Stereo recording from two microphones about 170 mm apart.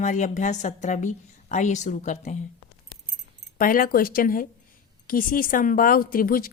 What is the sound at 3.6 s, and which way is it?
Speech, 55° left (ahead or behind).